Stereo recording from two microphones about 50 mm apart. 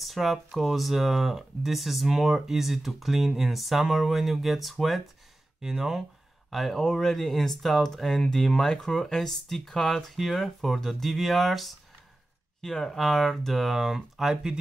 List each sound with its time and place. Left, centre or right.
0.0 s a sound: centre
0.6 s speech: centre
6.8 s speech: centre
14.3 s speech: centre